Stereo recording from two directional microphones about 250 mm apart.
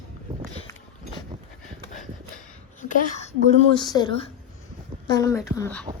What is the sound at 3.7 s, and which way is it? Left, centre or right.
Speech, centre.